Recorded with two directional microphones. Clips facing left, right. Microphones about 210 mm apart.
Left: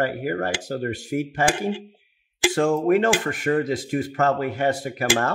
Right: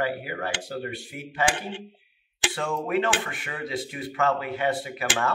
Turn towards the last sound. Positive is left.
turn(degrees=45)  # may be behind; listen again after turning